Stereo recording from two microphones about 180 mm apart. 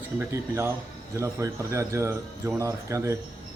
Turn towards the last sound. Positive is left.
turn(degrees=-15)  # may be behind; listen again after turning